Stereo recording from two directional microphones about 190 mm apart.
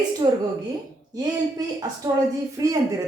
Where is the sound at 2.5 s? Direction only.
15° right (ahead or behind).